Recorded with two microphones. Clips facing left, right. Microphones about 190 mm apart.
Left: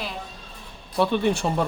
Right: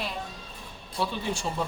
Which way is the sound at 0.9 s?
65° left (ahead or behind).